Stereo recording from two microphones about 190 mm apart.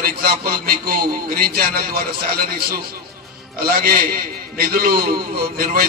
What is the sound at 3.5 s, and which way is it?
A man's voice, 50° right (ahead or behind).